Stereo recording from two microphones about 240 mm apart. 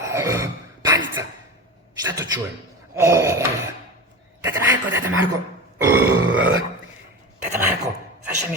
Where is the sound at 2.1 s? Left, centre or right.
Centre.